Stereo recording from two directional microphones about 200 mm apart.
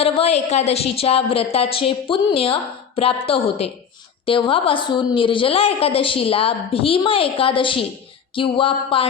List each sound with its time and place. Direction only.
0.0 s a woman's voice: 30° left (ahead or behind)